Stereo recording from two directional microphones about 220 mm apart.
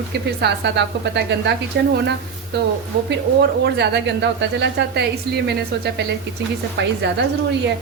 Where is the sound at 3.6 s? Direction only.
50° right (ahead or behind).